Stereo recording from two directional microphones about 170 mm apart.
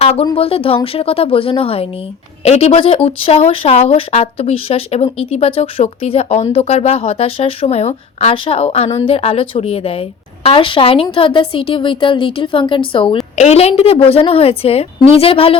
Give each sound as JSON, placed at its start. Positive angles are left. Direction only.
{"t": 0.0, "sound": "speech", "side_deg": 35}
{"t": 13.3, "sound": "speech", "side_deg": 40}